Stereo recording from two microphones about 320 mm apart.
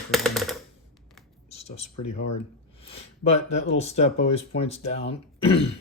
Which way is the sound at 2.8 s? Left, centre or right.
Centre.